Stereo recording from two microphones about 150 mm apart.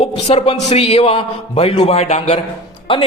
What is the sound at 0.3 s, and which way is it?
A man's voice, 45° left (ahead or behind).